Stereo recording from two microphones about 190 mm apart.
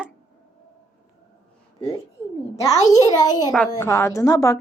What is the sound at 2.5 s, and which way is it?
A child's voice, 15° left (ahead or behind).